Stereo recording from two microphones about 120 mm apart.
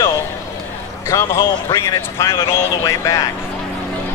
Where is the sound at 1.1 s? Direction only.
25° left (ahead or behind).